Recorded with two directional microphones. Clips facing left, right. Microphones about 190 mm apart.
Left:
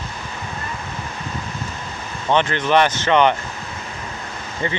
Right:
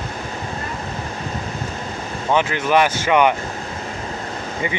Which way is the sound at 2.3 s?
5° right (ahead or behind).